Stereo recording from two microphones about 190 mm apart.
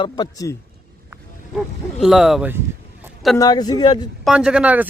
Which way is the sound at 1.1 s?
Centre (ahead or behind).